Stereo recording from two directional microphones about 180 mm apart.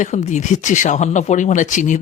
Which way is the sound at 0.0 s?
40° left (ahead or behind).